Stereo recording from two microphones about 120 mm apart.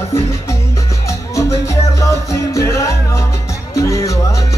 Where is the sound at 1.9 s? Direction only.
25° left (ahead or behind).